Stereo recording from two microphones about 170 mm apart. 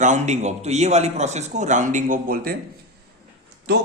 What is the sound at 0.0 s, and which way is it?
Speech, 45° right (ahead or behind).